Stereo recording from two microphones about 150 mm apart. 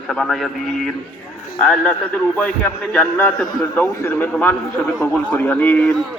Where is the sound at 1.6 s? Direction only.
5° left (ahead or behind).